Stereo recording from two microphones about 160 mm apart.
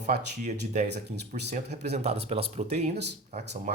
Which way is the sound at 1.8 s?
45° right (ahead or behind).